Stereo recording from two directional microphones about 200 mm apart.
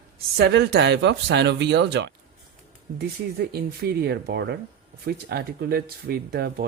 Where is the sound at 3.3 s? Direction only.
55° right (ahead or behind).